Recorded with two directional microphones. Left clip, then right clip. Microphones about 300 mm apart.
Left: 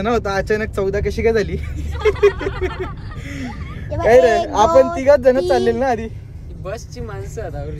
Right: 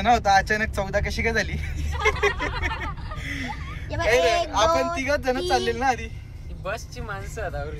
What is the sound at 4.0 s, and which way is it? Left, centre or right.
Speech, left.